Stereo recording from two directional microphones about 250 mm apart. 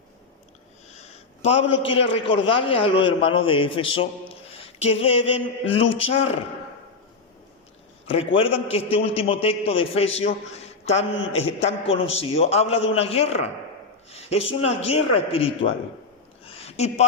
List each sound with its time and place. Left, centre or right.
0.9 s a man's voice: left
8.1 s a man's voice: left
16.5 s a sound: left